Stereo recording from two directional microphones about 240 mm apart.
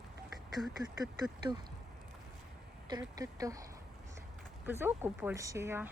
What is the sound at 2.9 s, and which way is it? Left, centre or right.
Speech, centre.